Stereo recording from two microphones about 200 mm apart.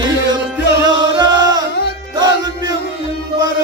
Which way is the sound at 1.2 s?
20° right (ahead or behind).